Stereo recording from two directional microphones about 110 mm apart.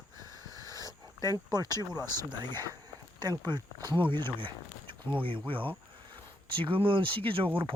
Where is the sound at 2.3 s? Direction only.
40° right (ahead or behind).